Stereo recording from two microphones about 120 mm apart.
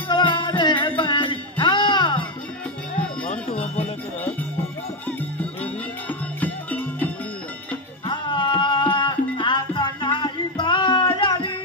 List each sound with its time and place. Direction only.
0.1 s music: 40° left (ahead or behind)
3.3 s music: 60° left (ahead or behind)
6.0 s music: 15° left (ahead or behind)
8.1 s music: 40° left (ahead or behind)